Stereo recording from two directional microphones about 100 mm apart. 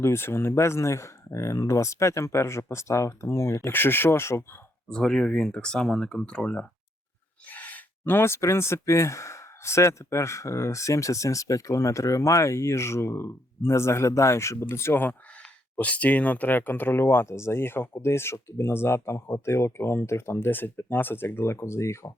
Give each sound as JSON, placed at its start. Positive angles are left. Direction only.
{"t": 0.0, "sound": "speech", "side_deg": 25}
{"t": 4.9, "sound": "speech", "side_deg": 5}